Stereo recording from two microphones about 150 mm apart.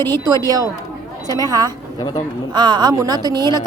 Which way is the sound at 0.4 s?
25° right (ahead or behind).